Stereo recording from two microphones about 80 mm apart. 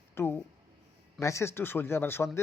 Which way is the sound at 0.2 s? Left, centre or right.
Left.